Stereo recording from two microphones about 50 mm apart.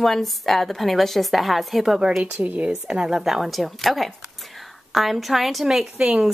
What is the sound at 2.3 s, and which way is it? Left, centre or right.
Speech, right.